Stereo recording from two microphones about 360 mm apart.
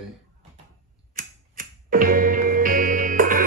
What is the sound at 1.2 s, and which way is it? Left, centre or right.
Music, right.